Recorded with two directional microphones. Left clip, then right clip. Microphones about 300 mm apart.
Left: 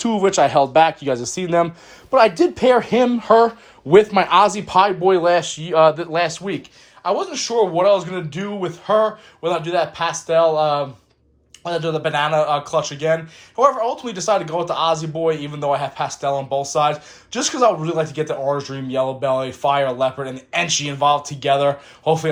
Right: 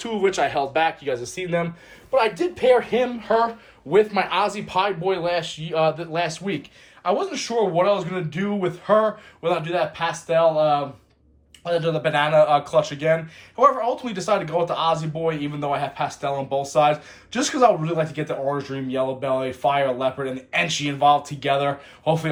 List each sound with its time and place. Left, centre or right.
0.0 s speech: centre